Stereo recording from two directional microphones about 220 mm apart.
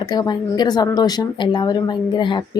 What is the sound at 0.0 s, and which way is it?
Speech, 20° left (ahead or behind).